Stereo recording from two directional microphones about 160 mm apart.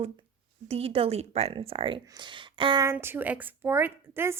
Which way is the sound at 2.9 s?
15° right (ahead or behind).